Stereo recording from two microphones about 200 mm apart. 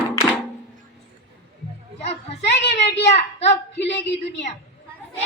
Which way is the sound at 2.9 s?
30° left (ahead or behind).